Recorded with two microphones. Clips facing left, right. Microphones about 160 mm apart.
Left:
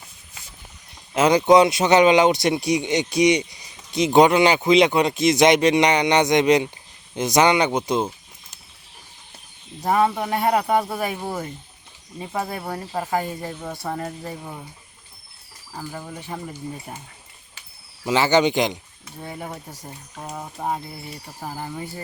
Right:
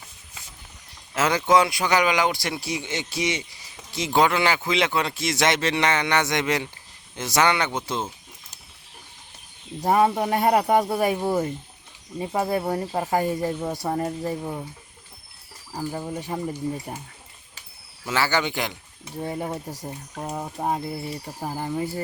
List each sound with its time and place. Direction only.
1.1 s speech: 15° left (ahead or behind)
9.9 s speech: 30° right (ahead or behind)
12.3 s speech: 30° right (ahead or behind)
13.4 s speech: 35° right (ahead or behind)
15.7 s speech: 25° right (ahead or behind)
18.0 s speech: 20° left (ahead or behind)
19.0 s speech: 25° right (ahead or behind)